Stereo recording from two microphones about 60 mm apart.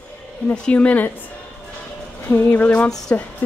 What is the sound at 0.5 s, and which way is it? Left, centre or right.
Speech, centre.